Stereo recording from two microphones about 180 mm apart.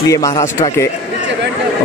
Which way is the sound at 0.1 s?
15° left (ahead or behind).